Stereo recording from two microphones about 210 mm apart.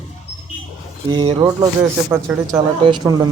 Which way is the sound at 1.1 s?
20° right (ahead or behind).